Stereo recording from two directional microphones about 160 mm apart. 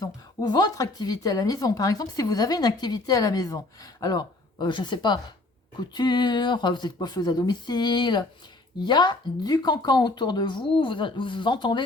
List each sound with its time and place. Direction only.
0.0 s speech: 25° left (ahead or behind)